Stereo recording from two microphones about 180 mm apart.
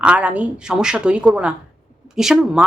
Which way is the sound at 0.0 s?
5° right (ahead or behind).